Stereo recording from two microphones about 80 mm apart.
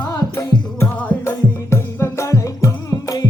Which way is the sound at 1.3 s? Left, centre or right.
Left.